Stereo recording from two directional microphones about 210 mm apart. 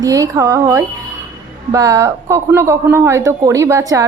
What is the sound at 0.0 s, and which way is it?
Speech, 15° right (ahead or behind).